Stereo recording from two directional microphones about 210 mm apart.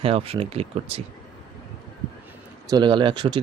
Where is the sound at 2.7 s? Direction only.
20° right (ahead or behind).